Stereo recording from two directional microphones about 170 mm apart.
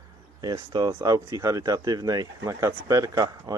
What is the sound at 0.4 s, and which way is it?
Speech, 25° right (ahead or behind).